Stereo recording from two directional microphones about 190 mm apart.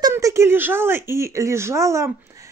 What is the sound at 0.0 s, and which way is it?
Speech, 15° right (ahead or behind).